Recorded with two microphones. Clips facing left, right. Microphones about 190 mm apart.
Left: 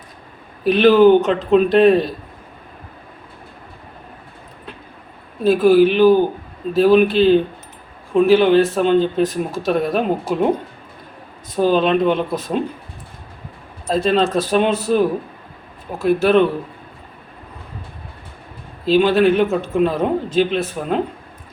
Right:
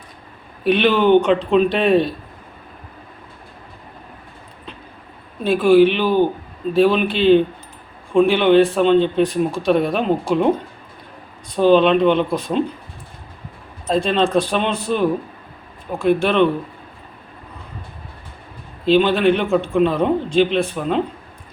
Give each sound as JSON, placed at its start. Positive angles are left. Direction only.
{"t": 0.6, "sound": "speech", "side_deg": 0}
{"t": 5.4, "sound": "speech", "side_deg": 0}
{"t": 11.5, "sound": "speech", "side_deg": 5}
{"t": 13.9, "sound": "speech", "side_deg": 5}
{"t": 18.9, "sound": "speech", "side_deg": 5}